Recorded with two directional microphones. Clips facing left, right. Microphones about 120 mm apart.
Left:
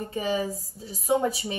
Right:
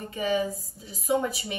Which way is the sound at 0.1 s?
35° left (ahead or behind).